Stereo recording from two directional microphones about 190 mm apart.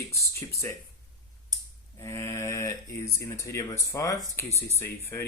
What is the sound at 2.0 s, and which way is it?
Speech, 15° left (ahead or behind).